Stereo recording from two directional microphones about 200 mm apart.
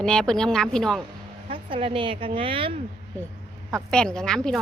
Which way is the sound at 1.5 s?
25° right (ahead or behind).